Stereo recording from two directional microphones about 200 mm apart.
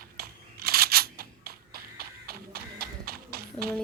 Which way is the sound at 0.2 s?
50° right (ahead or behind).